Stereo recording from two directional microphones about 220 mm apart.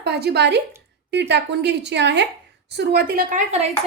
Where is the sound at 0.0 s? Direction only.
50° right (ahead or behind).